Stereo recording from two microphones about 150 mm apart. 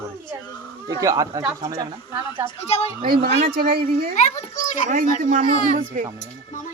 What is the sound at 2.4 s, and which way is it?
Speech, 40° left (ahead or behind).